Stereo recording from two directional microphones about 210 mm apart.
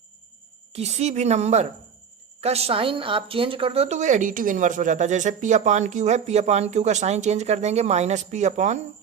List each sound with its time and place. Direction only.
0.7 s speech: 30° right (ahead or behind)